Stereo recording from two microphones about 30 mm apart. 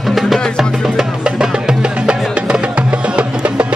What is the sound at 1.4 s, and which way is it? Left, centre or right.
Music, right.